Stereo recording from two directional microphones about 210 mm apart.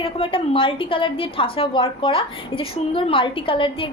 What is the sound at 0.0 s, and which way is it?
A woman's voice, 25° left (ahead or behind).